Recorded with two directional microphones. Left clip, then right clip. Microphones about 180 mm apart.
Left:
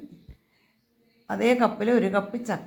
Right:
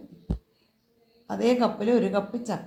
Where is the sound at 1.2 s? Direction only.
15° left (ahead or behind).